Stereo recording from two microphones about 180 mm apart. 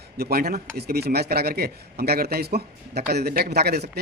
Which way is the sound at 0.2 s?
60° right (ahead or behind).